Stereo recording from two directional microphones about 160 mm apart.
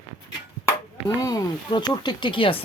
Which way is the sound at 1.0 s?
25° left (ahead or behind).